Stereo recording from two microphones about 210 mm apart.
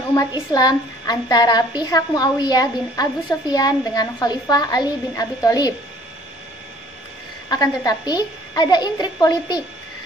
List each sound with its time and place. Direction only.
0.1 s a child's voice: 15° left (ahead or behind)
7.4 s a child's voice: 20° left (ahead or behind)